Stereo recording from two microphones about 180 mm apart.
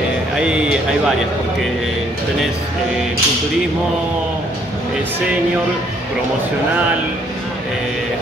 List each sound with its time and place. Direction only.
0.4 s a man's voice: 5° right (ahead or behind)